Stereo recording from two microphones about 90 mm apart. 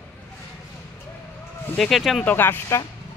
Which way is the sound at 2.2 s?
20° left (ahead or behind).